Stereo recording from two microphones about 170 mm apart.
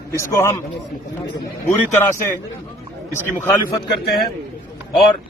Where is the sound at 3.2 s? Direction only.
15° left (ahead or behind).